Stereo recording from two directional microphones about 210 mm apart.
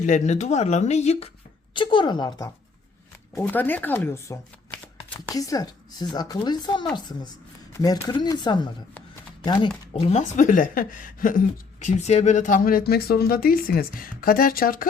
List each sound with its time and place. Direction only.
0.0 s speech: 35° left (ahead or behind)
3.3 s speech: 10° left (ahead or behind)
5.3 s a woman's voice: 15° left (ahead or behind); by 14.8 s 45° left (ahead or behind)